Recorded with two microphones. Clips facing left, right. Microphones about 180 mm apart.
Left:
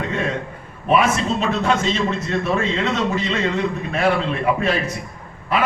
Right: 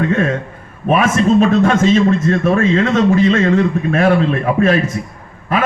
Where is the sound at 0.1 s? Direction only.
50° right (ahead or behind).